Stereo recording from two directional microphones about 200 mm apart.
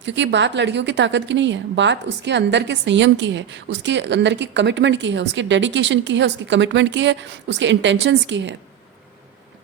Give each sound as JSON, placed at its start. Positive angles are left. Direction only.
{"t": 0.0, "sound": "a woman's voice", "side_deg": -65}